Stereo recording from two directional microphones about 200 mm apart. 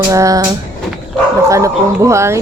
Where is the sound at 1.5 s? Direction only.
15° right (ahead or behind).